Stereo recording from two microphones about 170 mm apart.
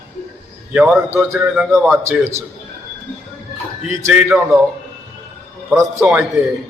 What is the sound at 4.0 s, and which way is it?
Speech, 15° right (ahead or behind).